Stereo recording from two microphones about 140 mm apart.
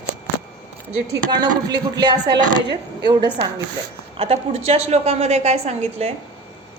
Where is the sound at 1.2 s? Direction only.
30° right (ahead or behind).